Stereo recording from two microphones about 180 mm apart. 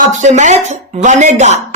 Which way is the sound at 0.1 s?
40° right (ahead or behind).